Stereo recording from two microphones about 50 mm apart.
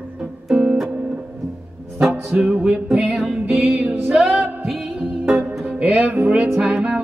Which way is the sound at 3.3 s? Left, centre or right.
Right.